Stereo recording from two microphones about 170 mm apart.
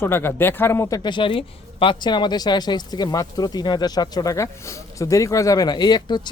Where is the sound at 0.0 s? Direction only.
10° left (ahead or behind).